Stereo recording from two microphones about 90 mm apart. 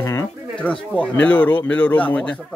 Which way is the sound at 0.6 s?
15° left (ahead or behind).